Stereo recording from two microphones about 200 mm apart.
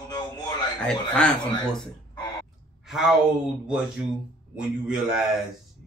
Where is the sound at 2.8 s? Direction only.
Centre (ahead or behind).